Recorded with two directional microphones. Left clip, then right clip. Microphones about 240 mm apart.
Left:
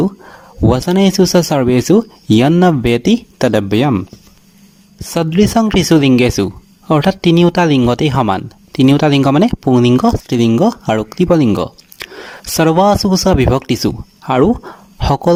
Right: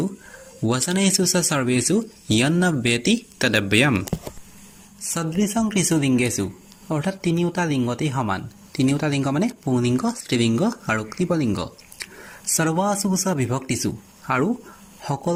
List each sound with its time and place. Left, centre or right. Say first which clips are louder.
0.7 s speech: left 8 dB; left
5.1 s speech: left 12 dB; left